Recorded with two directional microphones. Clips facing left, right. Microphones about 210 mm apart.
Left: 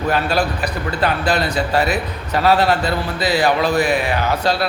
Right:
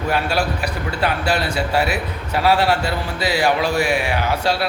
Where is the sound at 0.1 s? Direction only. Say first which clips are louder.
Left 1 dB; 10° right (ahead or behind).